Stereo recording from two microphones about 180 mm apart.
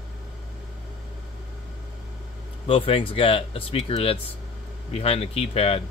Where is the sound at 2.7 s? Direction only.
30° left (ahead or behind).